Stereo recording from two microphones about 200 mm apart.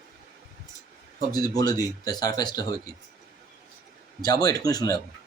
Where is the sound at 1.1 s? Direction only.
20° left (ahead or behind).